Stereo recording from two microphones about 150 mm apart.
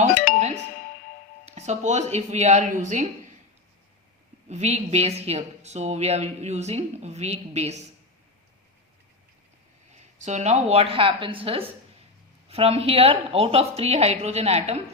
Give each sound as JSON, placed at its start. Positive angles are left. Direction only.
{"t": 0.1, "sound": "music", "side_deg": 75}
{"t": 1.5, "sound": "a woman's voice", "side_deg": -50}
{"t": 4.4, "sound": "a woman's voice", "side_deg": -50}
{"t": 10.2, "sound": "a woman's voice", "side_deg": -50}